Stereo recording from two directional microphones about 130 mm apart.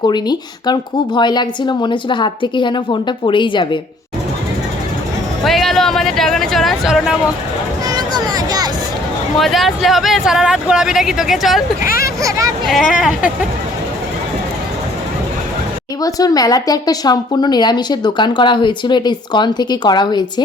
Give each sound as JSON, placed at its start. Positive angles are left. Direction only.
{"t": 0.1, "sound": "a woman's voice", "side_deg": 35}
{"t": 5.4, "sound": "speech", "side_deg": 0}
{"t": 7.9, "sound": "a sound", "side_deg": -30}
{"t": 9.4, "sound": "speech", "side_deg": 0}
{"t": 12.9, "sound": "speech", "side_deg": -5}
{"t": 16.0, "sound": "a woman's voice", "side_deg": 30}